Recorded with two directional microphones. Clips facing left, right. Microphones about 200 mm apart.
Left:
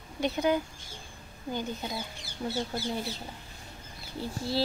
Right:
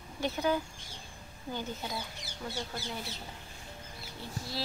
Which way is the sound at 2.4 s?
30° left (ahead or behind).